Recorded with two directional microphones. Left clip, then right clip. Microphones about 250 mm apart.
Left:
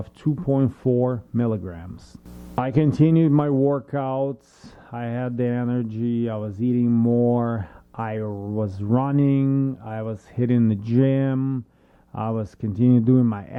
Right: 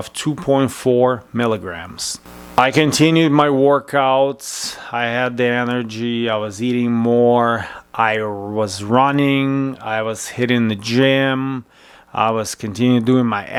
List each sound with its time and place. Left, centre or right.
0.3 s speech: centre
7.1 s speech: right
7.3 s speech: centre
8.3 s speech: right
8.5 s speech: centre